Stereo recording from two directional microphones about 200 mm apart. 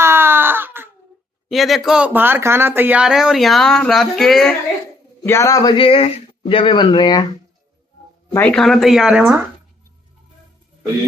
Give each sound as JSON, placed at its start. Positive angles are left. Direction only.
{"t": 0.0, "sound": "baby cry", "side_deg": -10}
{"t": 1.5, "sound": "speech", "side_deg": 0}
{"t": 5.2, "sound": "speech", "side_deg": 15}
{"t": 8.3, "sound": "speech", "side_deg": 5}